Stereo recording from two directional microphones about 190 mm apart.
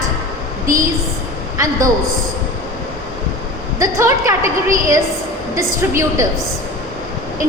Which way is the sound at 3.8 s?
15° right (ahead or behind).